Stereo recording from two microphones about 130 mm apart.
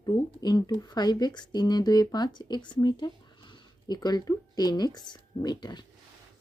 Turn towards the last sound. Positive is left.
turn(degrees=35)  # may be behind; listen again after turning